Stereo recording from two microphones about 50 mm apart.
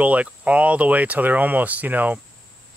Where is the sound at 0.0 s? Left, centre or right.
Right.